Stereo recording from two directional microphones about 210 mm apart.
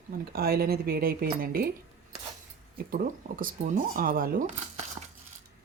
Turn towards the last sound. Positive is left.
turn(degrees=-40)  # may be behind; listen again after turning